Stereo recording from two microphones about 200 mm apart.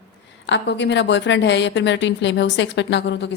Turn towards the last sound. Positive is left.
turn(degrees=60)  # may be behind; listen again after turning